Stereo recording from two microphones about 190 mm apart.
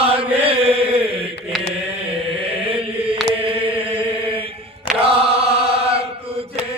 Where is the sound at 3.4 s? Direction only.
30° right (ahead or behind).